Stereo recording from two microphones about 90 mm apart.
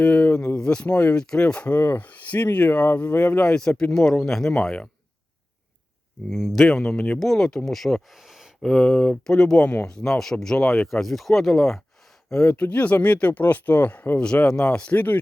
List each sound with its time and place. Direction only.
0.0 s speech: 15° left (ahead or behind)
6.3 s speech: centre (ahead or behind); by 15.2 s 20° left (ahead or behind)